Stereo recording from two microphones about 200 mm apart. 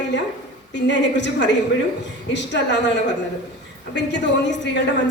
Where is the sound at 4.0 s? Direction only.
60° left (ahead or behind).